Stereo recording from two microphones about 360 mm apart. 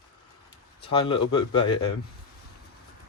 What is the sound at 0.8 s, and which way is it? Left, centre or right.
Speech, centre.